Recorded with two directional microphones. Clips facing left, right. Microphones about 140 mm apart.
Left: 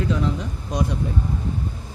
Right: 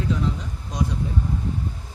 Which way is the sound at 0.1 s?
70° left (ahead or behind).